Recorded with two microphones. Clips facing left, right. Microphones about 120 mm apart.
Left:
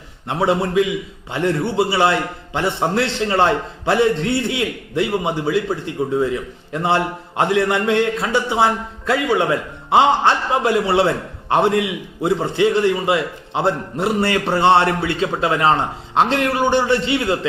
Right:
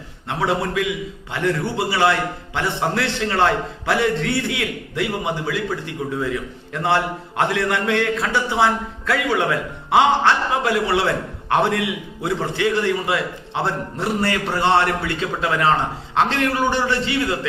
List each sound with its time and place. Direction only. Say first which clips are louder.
0.3 s a man's voice: left 3 dB; 20° left (ahead or behind)